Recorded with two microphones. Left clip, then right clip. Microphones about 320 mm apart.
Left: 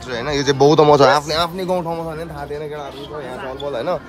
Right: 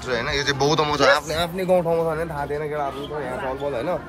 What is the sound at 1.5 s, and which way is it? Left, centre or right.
Speech, centre.